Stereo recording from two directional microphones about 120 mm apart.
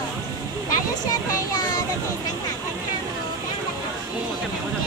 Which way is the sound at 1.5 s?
30° left (ahead or behind).